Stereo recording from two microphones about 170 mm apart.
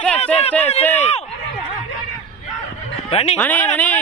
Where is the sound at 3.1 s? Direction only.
35° left (ahead or behind).